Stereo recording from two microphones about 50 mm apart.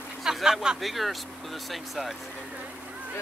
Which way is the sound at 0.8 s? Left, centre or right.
Centre.